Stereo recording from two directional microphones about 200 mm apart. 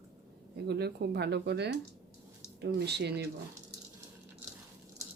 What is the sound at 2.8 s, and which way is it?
Speech, 55° right (ahead or behind).